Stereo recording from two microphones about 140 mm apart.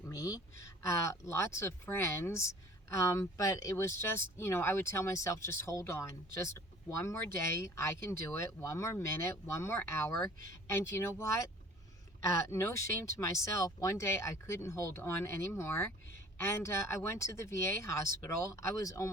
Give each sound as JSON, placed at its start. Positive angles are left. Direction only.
{"t": 0.0, "sound": "speech", "side_deg": 25}